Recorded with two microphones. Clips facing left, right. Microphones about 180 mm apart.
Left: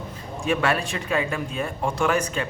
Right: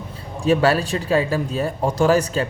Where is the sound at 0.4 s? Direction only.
35° right (ahead or behind).